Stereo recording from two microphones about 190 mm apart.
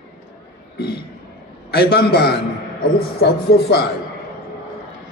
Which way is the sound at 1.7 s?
60° left (ahead or behind).